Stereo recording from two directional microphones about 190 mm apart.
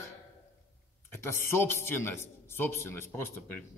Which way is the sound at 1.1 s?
15° left (ahead or behind).